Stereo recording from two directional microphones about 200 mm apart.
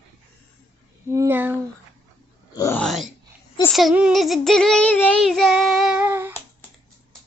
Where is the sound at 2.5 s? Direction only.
15° left (ahead or behind).